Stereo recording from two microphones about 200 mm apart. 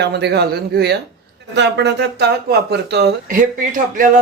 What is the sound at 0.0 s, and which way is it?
Speech, 55° right (ahead or behind).